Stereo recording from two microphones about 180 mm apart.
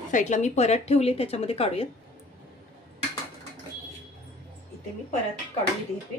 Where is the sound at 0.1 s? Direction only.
40° left (ahead or behind).